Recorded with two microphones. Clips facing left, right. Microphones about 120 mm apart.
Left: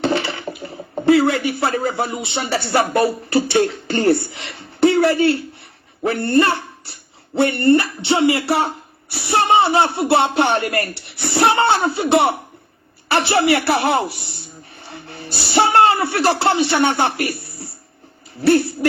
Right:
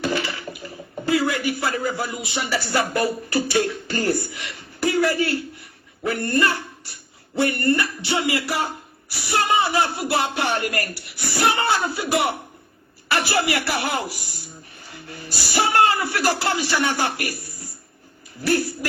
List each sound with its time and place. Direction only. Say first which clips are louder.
0.0 s speech: left 5 dB; 30° left (ahead or behind)
17.4 s a sound: left 5 dB; 30° left (ahead or behind)
18.4 s speech: left 7 dB; 25° left (ahead or behind)